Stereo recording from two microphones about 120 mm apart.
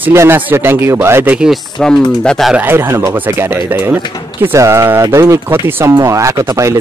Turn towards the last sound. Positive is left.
turn(degrees=-30)  # may be behind; listen again after turning